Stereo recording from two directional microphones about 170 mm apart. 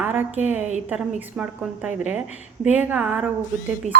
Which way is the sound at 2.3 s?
45° left (ahead or behind).